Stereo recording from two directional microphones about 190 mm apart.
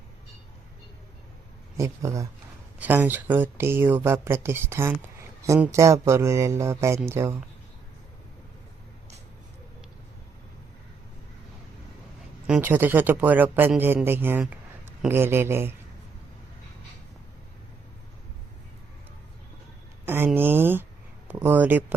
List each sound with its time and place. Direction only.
1.7 s speech: 15° right (ahead or behind)
12.5 s speech: 10° right (ahead or behind)
20.1 s a sound: 10° right (ahead or behind)